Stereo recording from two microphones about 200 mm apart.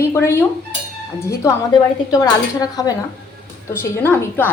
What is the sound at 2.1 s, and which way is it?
Speech, 20° left (ahead or behind).